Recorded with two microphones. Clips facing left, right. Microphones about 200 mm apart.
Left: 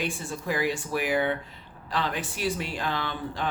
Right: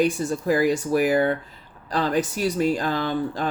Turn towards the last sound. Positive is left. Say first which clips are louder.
# right 7 dB
turn(degrees=-40)  # may be behind; listen again after turning